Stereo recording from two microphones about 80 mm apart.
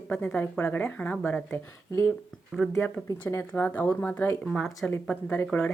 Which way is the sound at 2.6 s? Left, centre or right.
Centre.